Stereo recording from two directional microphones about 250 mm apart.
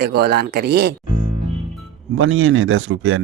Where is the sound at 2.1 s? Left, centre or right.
Right.